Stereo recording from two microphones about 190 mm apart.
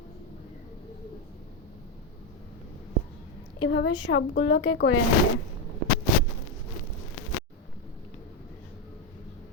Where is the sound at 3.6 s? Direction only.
65° left (ahead or behind); by 4.9 s 85° left.